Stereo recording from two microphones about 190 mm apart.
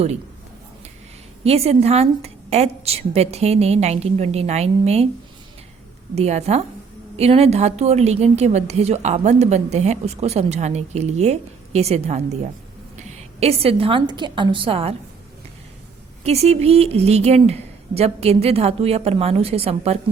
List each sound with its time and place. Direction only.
1.5 s a woman's voice: 30° right (ahead or behind)
6.1 s a woman's voice: 35° right (ahead or behind)
13.4 s a woman's voice: 30° right (ahead or behind)
16.2 s a woman's voice: 35° right (ahead or behind)